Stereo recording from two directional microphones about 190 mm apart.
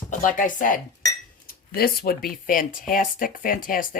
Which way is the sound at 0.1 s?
45° left (ahead or behind).